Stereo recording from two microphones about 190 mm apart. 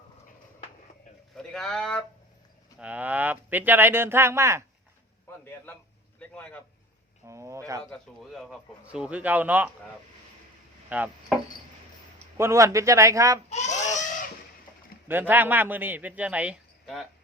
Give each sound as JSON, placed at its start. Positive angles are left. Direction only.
{"t": 1.4, "sound": "speech", "side_deg": 5}
{"t": 2.7, "sound": "a man's voice", "side_deg": -5}
{"t": 6.1, "sound": "a man's voice", "side_deg": 5}
{"t": 7.3, "sound": "a man's voice", "side_deg": -15}
{"t": 7.9, "sound": "a man's voice", "side_deg": 0}
{"t": 10.8, "sound": "speech", "side_deg": -10}
{"t": 12.4, "sound": "a man's voice", "side_deg": -15}
{"t": 13.5, "sound": "fowl", "side_deg": 40}
{"t": 15.0, "sound": "a man's voice", "side_deg": -10}